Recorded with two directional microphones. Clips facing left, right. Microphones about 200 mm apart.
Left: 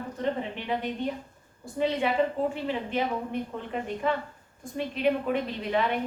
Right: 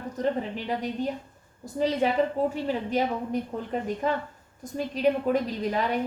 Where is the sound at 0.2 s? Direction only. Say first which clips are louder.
Right 3 dB; 40° right (ahead or behind).